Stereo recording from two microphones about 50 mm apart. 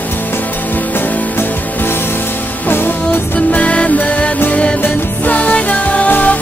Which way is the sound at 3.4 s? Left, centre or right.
Left.